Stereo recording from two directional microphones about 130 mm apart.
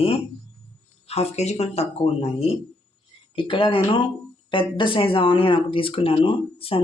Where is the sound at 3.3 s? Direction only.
40° left (ahead or behind).